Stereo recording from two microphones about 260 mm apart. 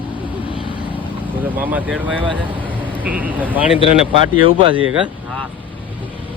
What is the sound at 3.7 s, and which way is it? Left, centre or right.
Speech, left.